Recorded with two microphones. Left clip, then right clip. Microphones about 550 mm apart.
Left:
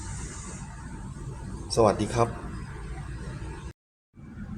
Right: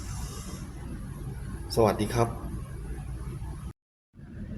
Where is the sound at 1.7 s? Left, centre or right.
Right.